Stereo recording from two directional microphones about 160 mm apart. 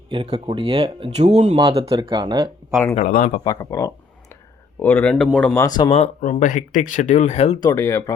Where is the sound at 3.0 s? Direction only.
60° left (ahead or behind).